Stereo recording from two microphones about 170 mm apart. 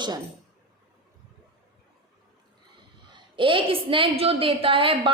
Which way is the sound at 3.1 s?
30° right (ahead or behind).